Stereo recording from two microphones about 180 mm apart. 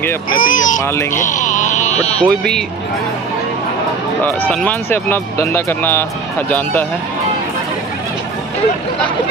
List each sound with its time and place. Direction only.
0.4 s speech: 50° left (ahead or behind)
1.1 s music: 45° left (ahead or behind)
4.4 s speech: 10° left (ahead or behind)